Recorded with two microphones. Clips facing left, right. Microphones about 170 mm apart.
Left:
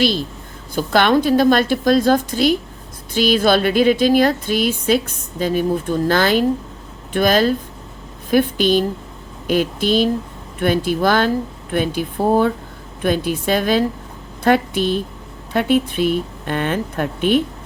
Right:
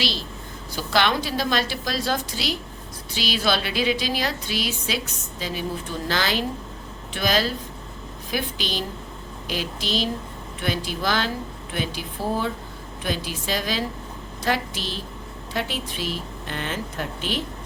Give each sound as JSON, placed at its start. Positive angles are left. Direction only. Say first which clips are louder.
{"t": 0.0, "sound": "speech", "louder": "left 10 dB", "side_deg": 50}